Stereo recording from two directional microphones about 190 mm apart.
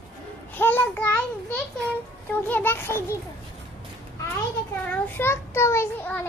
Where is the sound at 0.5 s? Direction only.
10° left (ahead or behind).